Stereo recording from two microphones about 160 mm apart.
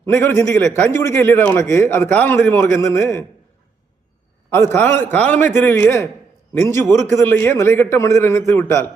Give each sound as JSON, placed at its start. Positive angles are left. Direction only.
{"t": 0.1, "sound": "a man's voice", "side_deg": 15}
{"t": 4.5, "sound": "a man's voice", "side_deg": 15}
{"t": 7.2, "sound": "a man's voice", "side_deg": 15}